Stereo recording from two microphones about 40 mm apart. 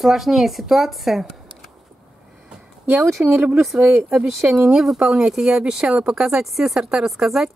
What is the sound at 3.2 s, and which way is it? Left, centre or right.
Speech, right.